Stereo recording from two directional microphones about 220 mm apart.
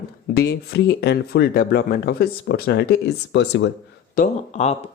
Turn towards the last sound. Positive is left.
turn(degrees=35)  # may be behind; listen again after turning